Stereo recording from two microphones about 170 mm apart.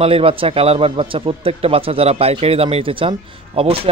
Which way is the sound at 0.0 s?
35° right (ahead or behind).